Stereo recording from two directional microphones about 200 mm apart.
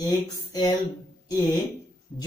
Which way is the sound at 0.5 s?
20° left (ahead or behind).